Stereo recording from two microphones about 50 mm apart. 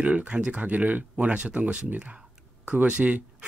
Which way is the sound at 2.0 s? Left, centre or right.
Right.